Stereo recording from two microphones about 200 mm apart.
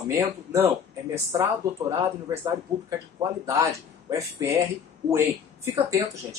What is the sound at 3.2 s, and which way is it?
Speech, 15° right (ahead or behind).